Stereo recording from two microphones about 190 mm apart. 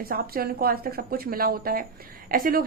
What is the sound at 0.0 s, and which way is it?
A woman's voice, 55° right (ahead or behind).